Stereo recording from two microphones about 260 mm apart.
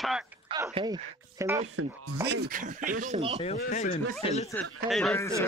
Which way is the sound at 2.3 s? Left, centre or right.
Right.